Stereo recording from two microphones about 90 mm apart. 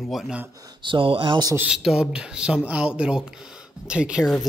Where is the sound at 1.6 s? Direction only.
10° right (ahead or behind).